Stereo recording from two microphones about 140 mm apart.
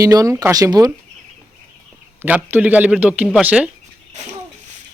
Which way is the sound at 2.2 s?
10° right (ahead or behind).